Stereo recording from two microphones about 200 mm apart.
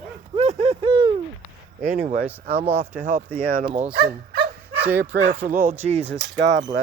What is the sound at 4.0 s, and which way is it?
Speech, 50° right (ahead or behind).